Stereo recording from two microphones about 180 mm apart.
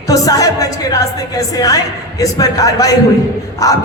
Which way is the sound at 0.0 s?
20° left (ahead or behind).